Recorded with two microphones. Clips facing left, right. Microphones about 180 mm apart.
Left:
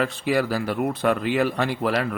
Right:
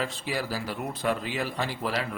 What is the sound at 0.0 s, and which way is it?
Speech, 60° left (ahead or behind).